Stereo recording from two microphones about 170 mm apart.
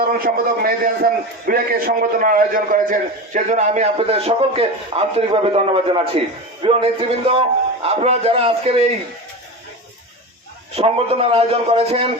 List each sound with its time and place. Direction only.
0.0 s a man's voice: 60° right (ahead or behind); by 8.9 s 35° right (ahead or behind)
10.8 s a man's voice: 35° right (ahead or behind)